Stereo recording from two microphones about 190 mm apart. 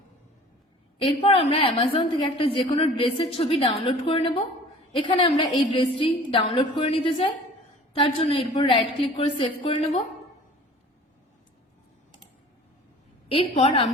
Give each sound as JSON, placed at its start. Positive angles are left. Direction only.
{"t": 1.0, "sound": "a woman's voice", "side_deg": 30}
{"t": 13.2, "sound": "a woman's voice", "side_deg": 30}